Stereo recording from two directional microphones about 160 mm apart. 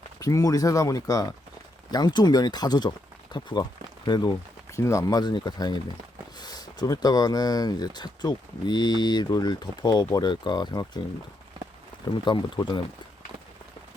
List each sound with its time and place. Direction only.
0.2 s speech: 20° left (ahead or behind)
12.2 s speech: 30° left (ahead or behind)